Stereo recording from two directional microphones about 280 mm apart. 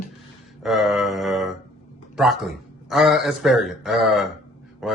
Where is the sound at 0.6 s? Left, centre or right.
Centre.